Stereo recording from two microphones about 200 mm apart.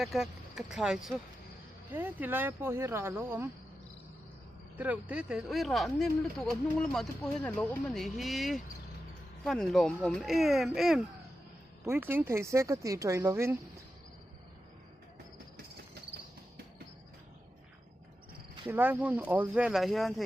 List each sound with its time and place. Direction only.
0.0 s speech: centre (ahead or behind)
4.8 s speech: 5° right (ahead or behind)
18.7 s speech: 10° right (ahead or behind)